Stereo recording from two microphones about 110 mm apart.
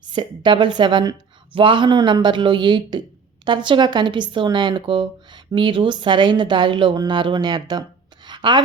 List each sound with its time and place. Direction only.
0.1 s a woman's voice: 45° right (ahead or behind)